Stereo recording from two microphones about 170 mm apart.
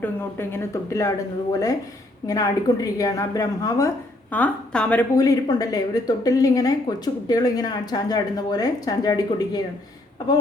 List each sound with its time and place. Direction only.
0.0 s speech: 15° left (ahead or behind)
2.2 s a woman's voice: 20° left (ahead or behind)
5.1 s a woman's voice: 20° left (ahead or behind)